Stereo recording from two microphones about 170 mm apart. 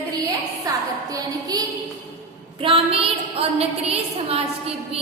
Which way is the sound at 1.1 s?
20° right (ahead or behind).